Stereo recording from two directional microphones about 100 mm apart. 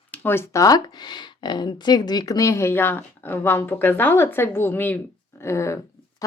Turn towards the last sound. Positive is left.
turn(degrees=30)  # may be behind; listen again after turning